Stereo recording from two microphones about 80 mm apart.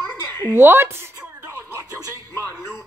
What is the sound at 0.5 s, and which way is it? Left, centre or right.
Speech, right.